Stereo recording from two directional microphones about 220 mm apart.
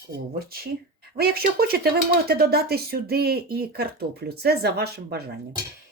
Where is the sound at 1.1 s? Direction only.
45° right (ahead or behind).